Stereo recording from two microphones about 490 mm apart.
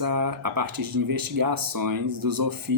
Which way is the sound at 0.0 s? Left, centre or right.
Right.